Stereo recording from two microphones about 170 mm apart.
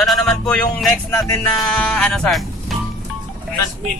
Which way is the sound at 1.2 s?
15° left (ahead or behind).